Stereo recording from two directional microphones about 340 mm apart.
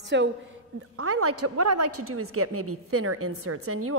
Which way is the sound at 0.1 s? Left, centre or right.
Right.